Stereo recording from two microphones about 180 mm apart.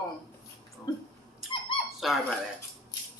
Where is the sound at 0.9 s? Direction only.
20° left (ahead or behind).